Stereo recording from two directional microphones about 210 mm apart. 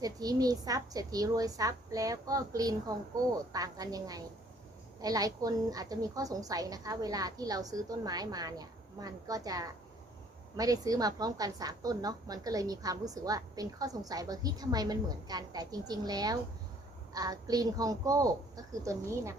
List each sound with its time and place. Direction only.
0.0 s a woman's voice: 15° right (ahead or behind)